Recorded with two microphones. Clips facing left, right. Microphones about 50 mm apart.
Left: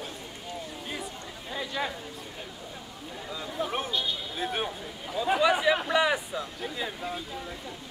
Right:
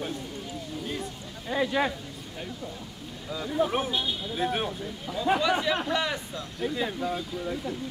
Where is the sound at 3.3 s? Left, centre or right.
Centre.